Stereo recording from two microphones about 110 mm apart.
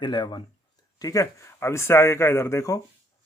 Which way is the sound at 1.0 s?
30° left (ahead or behind).